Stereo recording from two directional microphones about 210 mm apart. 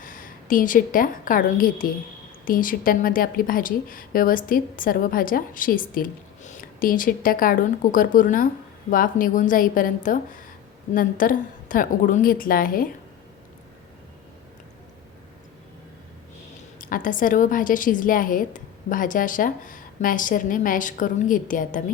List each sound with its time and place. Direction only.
0.0 s a woman's voice: 40° left (ahead or behind)
16.7 s a woman's voice: 40° left (ahead or behind)